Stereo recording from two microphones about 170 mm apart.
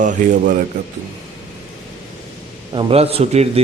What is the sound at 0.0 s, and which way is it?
Speech, 50° right (ahead or behind).